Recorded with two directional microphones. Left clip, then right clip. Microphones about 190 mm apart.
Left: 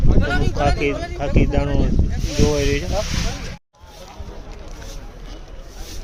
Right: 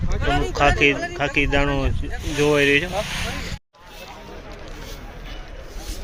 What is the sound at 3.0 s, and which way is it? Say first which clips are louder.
Speech: left 1 dB; 55° left (ahead or behind).